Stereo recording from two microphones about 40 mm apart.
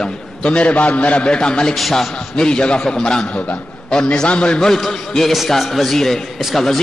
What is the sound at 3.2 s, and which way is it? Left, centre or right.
Speech, left.